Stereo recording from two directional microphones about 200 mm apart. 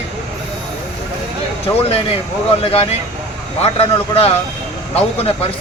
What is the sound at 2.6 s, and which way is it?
A man's voice, 30° left (ahead or behind).